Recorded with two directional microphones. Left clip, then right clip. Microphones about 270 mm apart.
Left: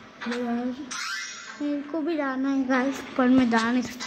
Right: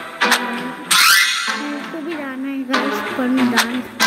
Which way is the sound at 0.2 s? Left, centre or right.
Right.